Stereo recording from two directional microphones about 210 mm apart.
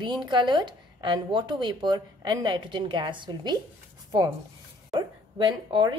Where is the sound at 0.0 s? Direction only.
20° right (ahead or behind).